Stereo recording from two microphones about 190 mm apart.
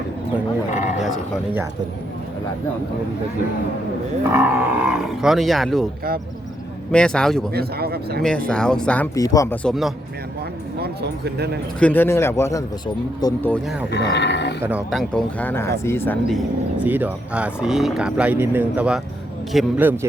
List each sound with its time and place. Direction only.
0.7 s sheep: 35° left (ahead or behind)
4.4 s speech: 5° right (ahead or behind)
6.9 s speech: 5° left (ahead or behind)
7.5 s speech: 55° right (ahead or behind)
8.4 s speech: 5° left (ahead or behind)
9.1 s speech: 20° left (ahead or behind)
9.6 s speech: centre (ahead or behind)
10.8 s speech: 60° right (ahead or behind)
11.8 s speech: 10° left (ahead or behind)
13.9 s speech: 65° left (ahead or behind)
14.6 s speech: 5° right (ahead or behind); by 16.1 s 15° left (ahead or behind)
16.8 s speech: 10° right (ahead or behind)